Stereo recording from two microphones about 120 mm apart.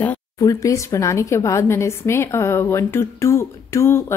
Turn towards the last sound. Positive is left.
turn(degrees=20)  # may be behind; listen again after turning